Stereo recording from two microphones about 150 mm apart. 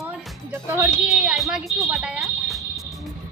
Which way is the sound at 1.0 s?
5° right (ahead or behind).